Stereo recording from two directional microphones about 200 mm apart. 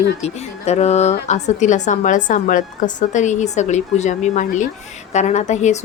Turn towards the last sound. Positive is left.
turn(degrees=35)  # may be behind; listen again after turning